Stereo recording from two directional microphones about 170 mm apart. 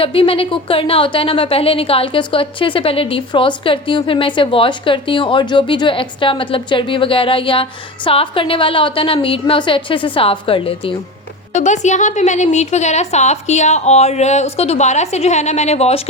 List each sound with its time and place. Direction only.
0.0 s speech: 35° left (ahead or behind)
11.5 s a woman's voice: 45° left (ahead or behind)